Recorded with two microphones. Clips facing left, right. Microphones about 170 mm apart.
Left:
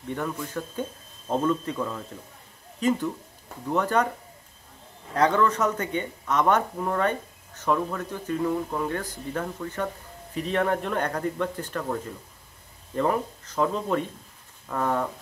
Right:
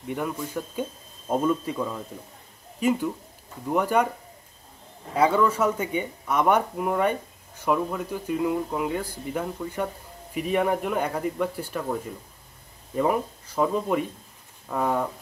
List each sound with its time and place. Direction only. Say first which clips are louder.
0.1 s speech: right 1 dB; 10° right (ahead or behind)
5.1 s speech: right 1 dB; 10° right (ahead or behind)